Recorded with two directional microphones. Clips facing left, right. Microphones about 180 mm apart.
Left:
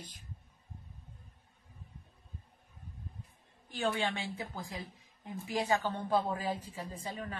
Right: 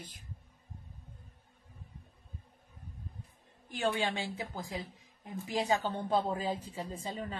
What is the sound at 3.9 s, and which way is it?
A woman's voice, 15° right (ahead or behind).